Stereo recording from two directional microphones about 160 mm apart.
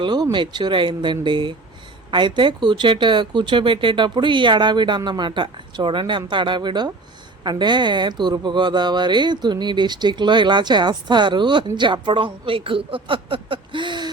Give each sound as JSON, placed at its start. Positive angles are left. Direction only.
{"t": 0.0, "sound": "speech", "side_deg": -30}